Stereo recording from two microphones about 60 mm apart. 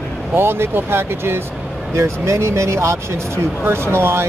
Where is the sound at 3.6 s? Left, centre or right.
Right.